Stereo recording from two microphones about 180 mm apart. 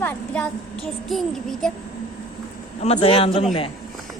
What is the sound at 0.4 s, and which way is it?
Speech, 5° left (ahead or behind).